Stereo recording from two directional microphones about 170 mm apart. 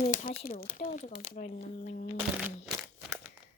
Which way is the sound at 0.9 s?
55° left (ahead or behind).